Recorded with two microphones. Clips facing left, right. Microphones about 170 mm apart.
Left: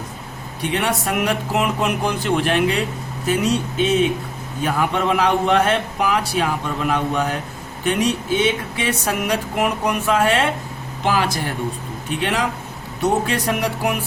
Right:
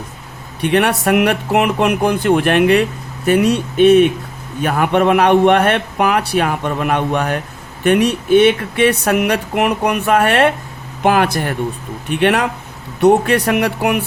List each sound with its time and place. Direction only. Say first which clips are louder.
0.6 s a man's voice: right 7 dB; 65° right (ahead or behind)